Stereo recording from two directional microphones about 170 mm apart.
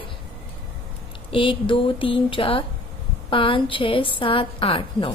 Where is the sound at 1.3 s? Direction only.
30° left (ahead or behind).